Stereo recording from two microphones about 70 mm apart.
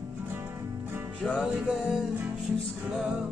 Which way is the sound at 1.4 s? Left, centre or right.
Centre.